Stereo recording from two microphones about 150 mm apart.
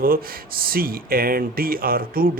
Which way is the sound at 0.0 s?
75° right (ahead or behind).